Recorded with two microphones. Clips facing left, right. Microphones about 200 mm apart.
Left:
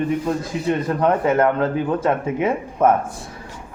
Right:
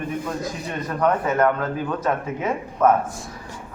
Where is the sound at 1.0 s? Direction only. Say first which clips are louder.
Even; 30° left (ahead or behind).